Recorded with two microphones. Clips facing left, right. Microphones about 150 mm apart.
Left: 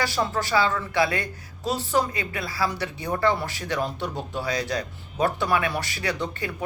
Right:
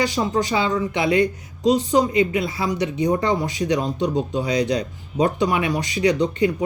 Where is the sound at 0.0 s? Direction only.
20° right (ahead or behind).